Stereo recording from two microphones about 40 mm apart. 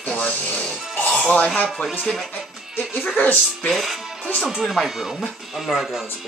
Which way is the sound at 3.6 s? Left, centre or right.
Centre.